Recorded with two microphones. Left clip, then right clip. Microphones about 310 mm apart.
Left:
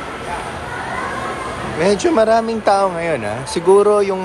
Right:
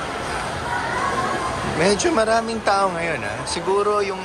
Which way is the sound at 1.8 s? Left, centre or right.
Centre.